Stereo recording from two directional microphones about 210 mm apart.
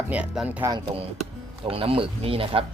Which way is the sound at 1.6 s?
25° right (ahead or behind).